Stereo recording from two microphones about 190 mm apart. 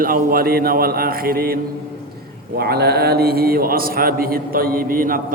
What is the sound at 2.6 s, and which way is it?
A man's voice, 55° right (ahead or behind).